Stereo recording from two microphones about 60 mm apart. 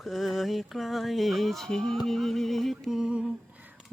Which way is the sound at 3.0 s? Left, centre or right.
Centre.